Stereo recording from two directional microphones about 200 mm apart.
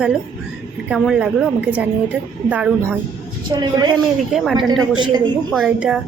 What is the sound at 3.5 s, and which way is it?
Speech, 20° right (ahead or behind).